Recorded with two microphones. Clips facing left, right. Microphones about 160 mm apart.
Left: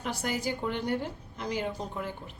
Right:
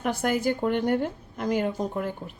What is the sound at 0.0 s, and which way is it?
A woman's voice, 55° right (ahead or behind).